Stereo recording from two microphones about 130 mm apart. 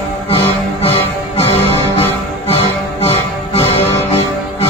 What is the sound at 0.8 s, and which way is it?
Music, 50° left (ahead or behind).